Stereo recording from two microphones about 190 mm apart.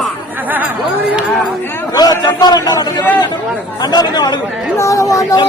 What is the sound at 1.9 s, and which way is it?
Speech, 20° left (ahead or behind).